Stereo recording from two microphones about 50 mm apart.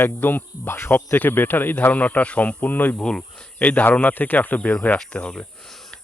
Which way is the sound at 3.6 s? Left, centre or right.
Left.